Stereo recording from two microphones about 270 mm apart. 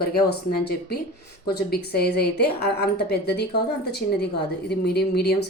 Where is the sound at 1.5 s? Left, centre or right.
Left.